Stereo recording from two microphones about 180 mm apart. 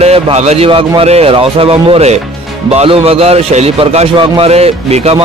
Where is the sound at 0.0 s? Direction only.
35° right (ahead or behind).